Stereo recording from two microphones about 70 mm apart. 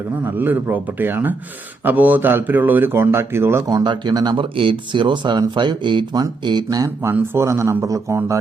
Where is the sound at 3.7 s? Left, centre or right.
Right.